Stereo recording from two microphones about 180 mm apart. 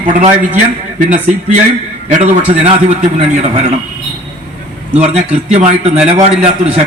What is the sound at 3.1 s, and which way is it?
Speech, 35° right (ahead or behind).